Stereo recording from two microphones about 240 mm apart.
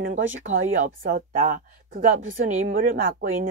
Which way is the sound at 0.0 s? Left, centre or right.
Right.